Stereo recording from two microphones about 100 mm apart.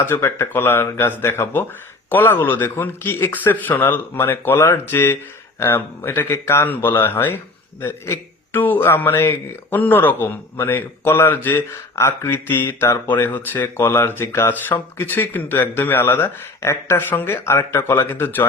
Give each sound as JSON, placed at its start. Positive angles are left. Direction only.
{"t": 0.0, "sound": "a man's voice", "side_deg": 25}